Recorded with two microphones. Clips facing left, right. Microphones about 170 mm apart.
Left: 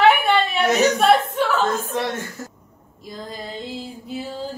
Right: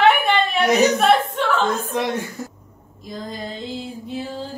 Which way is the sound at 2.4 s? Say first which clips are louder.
Right 3 dB; 15° right (ahead or behind).